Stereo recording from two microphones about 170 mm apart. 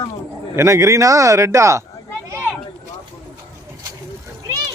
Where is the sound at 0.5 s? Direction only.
15° right (ahead or behind).